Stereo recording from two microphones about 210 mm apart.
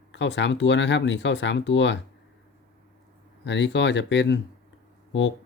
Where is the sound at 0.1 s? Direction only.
60° left (ahead or behind).